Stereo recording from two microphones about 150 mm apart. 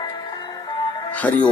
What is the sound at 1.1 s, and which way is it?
Music, 10° left (ahead or behind).